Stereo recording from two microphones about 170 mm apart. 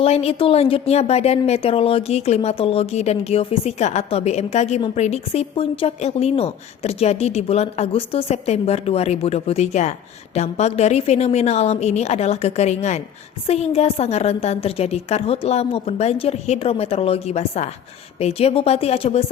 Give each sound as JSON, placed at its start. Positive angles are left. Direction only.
{"t": 0.0, "sound": "a woman's voice", "side_deg": 35}